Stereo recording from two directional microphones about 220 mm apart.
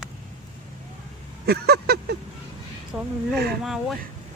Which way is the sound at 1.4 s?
45° right (ahead or behind).